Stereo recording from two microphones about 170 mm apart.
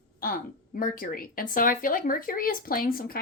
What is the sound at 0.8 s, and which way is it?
Speech, 55° left (ahead or behind).